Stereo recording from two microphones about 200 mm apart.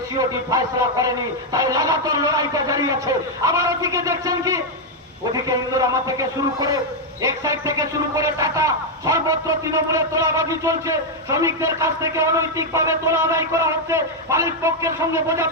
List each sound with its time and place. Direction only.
0.2 s speech: 20° right (ahead or behind)
7.2 s speech: 15° right (ahead or behind)